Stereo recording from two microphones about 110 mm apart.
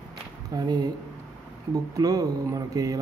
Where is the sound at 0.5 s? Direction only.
30° right (ahead or behind).